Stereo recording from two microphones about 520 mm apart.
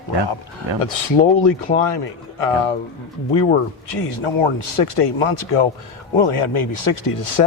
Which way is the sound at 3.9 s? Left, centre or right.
Left.